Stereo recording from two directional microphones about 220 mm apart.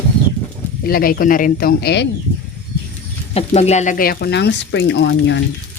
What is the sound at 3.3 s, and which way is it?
Speech, 30° left (ahead or behind).